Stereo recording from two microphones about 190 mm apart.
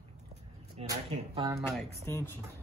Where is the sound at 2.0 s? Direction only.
15° left (ahead or behind).